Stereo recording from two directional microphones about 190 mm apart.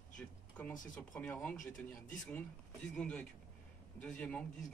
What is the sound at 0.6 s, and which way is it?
A man's voice, 5° left (ahead or behind).